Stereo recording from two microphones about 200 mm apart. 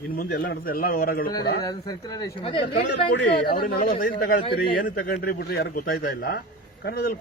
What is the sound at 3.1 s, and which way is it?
Speech, 50° left (ahead or behind).